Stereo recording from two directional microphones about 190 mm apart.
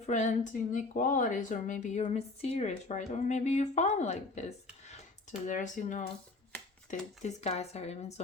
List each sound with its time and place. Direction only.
0.0 s a woman's voice: 40° left (ahead or behind)
7.2 s a woman's voice: 35° left (ahead or behind)